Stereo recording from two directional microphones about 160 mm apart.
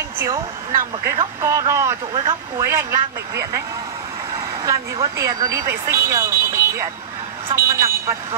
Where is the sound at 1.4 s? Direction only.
20° right (ahead or behind).